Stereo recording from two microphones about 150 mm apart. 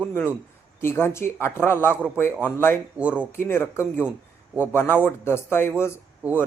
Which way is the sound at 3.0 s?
10° right (ahead or behind).